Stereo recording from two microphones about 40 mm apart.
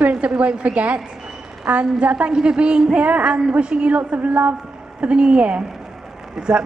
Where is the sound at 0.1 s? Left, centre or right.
Right.